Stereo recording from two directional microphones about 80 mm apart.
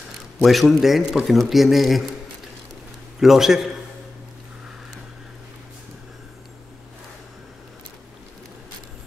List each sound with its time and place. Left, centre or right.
0.4 s speech: centre
3.2 s speech: centre